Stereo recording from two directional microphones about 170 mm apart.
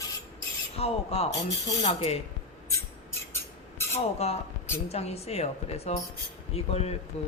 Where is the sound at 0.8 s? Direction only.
35° left (ahead or behind).